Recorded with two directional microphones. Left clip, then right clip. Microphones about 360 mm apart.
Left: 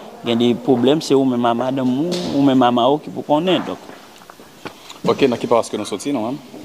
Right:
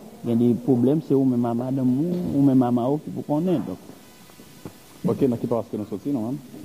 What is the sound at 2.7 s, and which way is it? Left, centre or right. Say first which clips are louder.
Speech: left 8 dB; left.